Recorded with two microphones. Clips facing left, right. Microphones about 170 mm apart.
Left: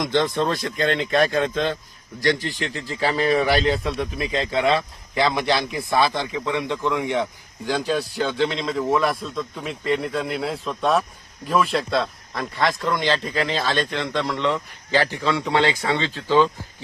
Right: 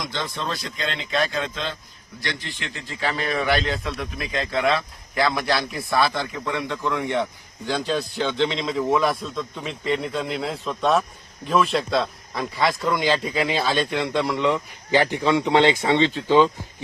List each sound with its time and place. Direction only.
0.1 s speech: 55° left (ahead or behind)
2.2 s a man's voice: 40° left (ahead or behind); by 16.5 s 15° right (ahead or behind)